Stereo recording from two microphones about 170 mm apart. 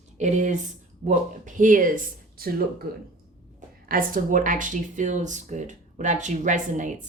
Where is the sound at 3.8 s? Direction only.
55° right (ahead or behind).